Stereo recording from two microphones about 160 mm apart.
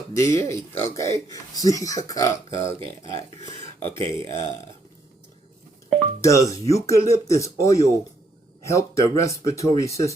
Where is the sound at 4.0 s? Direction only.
30° right (ahead or behind).